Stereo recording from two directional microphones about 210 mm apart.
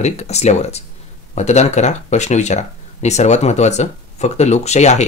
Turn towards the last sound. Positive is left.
turn(degrees=30)  # may be behind; listen again after turning